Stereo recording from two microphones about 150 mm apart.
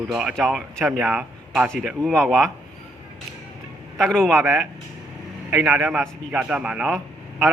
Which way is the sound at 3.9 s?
Centre (ahead or behind).